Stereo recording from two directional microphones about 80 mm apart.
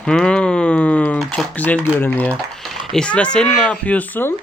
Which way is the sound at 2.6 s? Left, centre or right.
Centre.